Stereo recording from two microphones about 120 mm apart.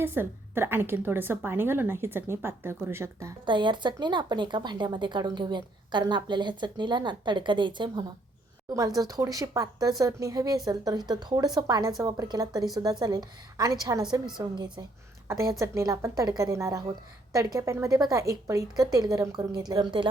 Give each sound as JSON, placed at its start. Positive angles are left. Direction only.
{"t": 0.0, "sound": "a woman's voice", "side_deg": -20}
{"t": 3.4, "sound": "a woman's voice", "side_deg": -40}
{"t": 9.0, "sound": "a woman's voice", "side_deg": -30}
{"t": 15.3, "sound": "a woman's voice", "side_deg": -25}